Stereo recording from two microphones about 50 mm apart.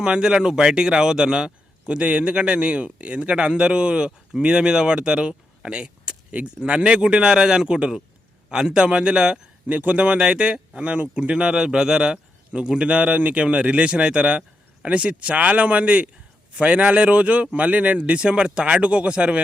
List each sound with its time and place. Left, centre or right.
0.0 s speech: centre
9.6 s speech: right